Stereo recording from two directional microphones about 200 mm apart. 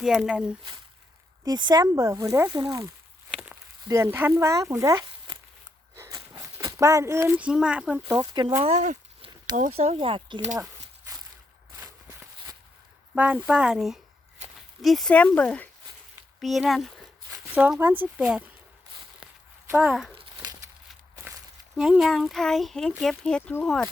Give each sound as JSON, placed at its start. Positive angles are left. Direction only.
{"t": 0.0, "sound": "speech", "side_deg": 0}
{"t": 1.5, "sound": "speech", "side_deg": -20}
{"t": 3.3, "sound": "a sound", "side_deg": -5}
{"t": 3.8, "sound": "speech", "side_deg": -15}
{"t": 6.0, "sound": "a sound", "side_deg": -15}
{"t": 6.6, "sound": "speech", "side_deg": -15}
{"t": 11.8, "sound": "walk", "side_deg": -15}
{"t": 13.1, "sound": "speech", "side_deg": -5}
{"t": 19.2, "sound": "a sound", "side_deg": -5}
{"t": 20.1, "sound": "crumpling", "side_deg": -25}
{"t": 21.8, "sound": "speech", "side_deg": -5}